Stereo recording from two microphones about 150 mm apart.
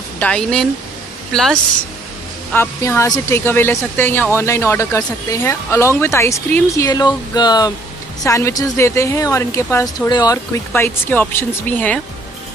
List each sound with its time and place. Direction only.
0.2 s speech: 5° left (ahead or behind)
2.5 s speech: 15° left (ahead or behind)